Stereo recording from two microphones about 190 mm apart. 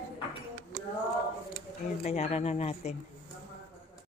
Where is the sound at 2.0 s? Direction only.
35° left (ahead or behind).